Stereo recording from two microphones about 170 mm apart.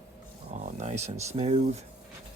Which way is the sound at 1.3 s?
40° right (ahead or behind).